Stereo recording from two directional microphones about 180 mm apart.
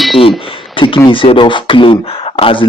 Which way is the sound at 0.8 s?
30° left (ahead or behind).